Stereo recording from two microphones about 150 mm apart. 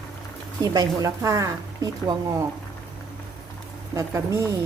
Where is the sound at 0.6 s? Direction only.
25° right (ahead or behind).